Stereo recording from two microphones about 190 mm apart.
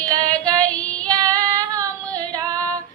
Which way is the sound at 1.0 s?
20° right (ahead or behind).